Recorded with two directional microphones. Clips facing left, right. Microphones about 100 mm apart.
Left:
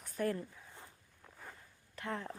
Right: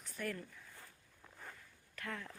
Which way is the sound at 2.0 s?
30° left (ahead or behind).